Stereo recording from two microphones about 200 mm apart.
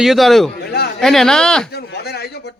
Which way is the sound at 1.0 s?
Centre (ahead or behind).